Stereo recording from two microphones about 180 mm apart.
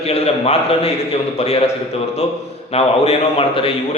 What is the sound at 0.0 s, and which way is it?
A man's voice, 35° left (ahead or behind).